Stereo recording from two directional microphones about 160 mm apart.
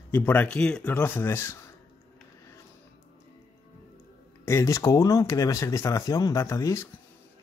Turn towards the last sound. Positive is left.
turn(degrees=20)  # may be behind; listen again after turning